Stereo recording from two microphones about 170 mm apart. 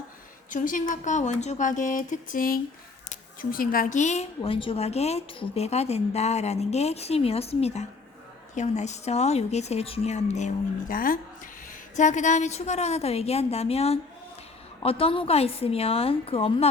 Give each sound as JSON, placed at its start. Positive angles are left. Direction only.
{"t": 0.5, "sound": "a woman's voice", "side_deg": 50}